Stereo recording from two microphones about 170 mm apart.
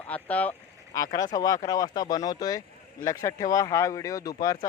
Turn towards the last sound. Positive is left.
turn(degrees=20)  # may be behind; listen again after turning